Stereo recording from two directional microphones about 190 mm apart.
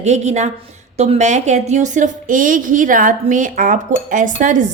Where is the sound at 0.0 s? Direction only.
35° right (ahead or behind).